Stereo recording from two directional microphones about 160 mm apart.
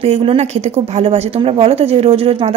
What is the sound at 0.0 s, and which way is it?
A woman's voice, 35° right (ahead or behind).